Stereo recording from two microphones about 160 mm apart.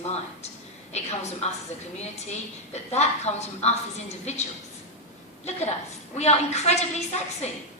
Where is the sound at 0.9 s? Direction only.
45° left (ahead or behind).